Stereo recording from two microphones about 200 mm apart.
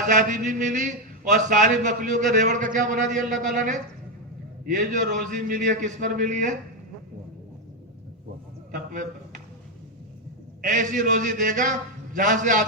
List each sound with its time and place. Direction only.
0.1 s a man's voice: 40° right (ahead or behind)
8.7 s a sound: 40° right (ahead or behind)
10.6 s a man's voice: 40° right (ahead or behind)